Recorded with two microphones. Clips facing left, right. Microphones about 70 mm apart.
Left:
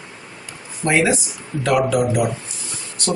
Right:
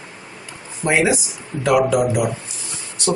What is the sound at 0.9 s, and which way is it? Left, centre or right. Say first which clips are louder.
Speech: even; centre.